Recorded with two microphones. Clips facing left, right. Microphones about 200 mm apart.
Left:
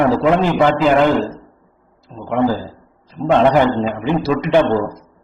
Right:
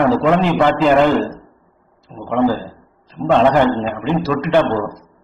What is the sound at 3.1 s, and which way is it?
A man's voice, 15° left (ahead or behind).